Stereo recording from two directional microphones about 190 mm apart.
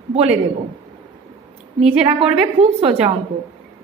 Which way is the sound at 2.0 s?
30° right (ahead or behind).